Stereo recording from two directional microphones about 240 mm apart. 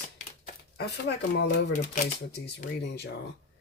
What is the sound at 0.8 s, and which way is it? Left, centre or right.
Speech, left.